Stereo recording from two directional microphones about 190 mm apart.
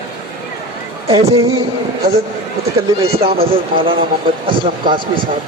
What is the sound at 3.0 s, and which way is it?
Speech, 30° right (ahead or behind).